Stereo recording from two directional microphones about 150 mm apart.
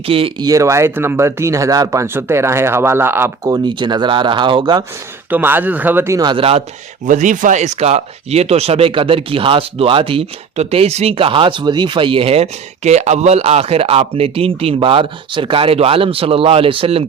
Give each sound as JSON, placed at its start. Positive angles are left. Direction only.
{"t": 0.1, "sound": "speech", "side_deg": -40}
{"t": 0.4, "sound": "speech", "side_deg": -20}
{"t": 5.3, "sound": "speech", "side_deg": -15}
{"t": 7.1, "sound": "speech", "side_deg": -60}